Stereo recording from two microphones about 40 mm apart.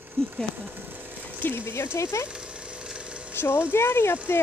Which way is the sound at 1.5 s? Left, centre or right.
Left.